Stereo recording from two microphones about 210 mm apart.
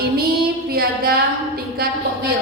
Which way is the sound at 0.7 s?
45° right (ahead or behind).